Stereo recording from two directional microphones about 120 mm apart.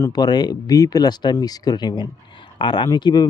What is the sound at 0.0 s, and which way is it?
Speech, 35° left (ahead or behind).